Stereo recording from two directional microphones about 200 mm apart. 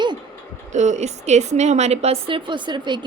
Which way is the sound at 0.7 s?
35° right (ahead or behind).